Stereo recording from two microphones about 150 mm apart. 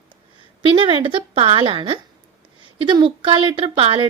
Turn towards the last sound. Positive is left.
turn(degrees=-35)  # may be behind; listen again after turning